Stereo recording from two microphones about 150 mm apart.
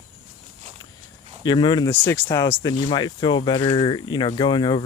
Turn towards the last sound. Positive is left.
turn(degrees=30)  # may be behind; listen again after turning